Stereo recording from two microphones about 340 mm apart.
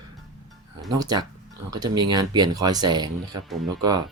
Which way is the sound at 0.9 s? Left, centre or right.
Centre.